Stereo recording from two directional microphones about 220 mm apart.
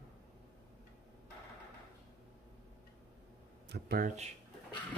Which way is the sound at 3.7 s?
45° right (ahead or behind).